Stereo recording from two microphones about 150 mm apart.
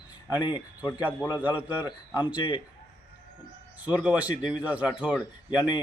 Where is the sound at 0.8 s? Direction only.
25° left (ahead or behind).